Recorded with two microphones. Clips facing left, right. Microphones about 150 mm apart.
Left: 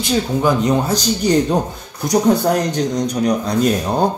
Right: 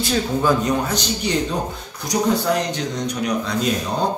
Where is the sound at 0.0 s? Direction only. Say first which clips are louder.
Left 3 dB; 20° left (ahead or behind).